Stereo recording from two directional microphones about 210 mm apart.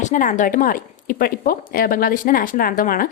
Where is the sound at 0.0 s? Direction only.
35° left (ahead or behind).